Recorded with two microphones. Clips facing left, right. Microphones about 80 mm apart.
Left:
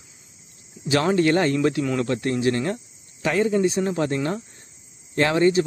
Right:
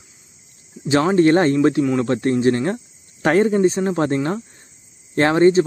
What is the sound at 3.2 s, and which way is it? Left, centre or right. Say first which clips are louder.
Speech: right 5 dB; right.